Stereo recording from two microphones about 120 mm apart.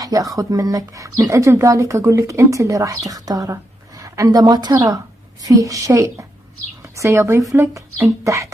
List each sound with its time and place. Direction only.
0.0 s a woman's voice: 30° right (ahead or behind)